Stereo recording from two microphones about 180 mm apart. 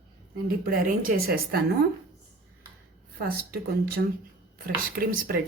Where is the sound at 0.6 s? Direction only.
55° right (ahead or behind).